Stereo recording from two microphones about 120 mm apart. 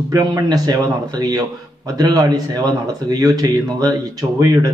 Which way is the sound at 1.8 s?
30° right (ahead or behind).